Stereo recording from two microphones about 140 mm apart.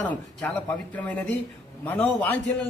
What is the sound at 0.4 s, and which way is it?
A man's voice, 10° left (ahead or behind).